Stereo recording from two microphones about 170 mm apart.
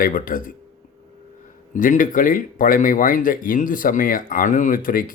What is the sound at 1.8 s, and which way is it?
Speech, 50° left (ahead or behind).